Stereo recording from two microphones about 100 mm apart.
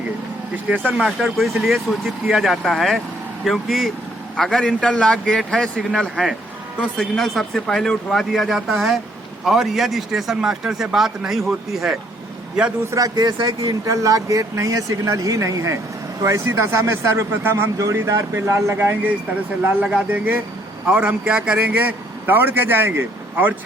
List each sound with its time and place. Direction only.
0.9 s a man's voice: 5° right (ahead or behind)
12.9 s speech: 40° right (ahead or behind); by 23.6 s 20° right (ahead or behind)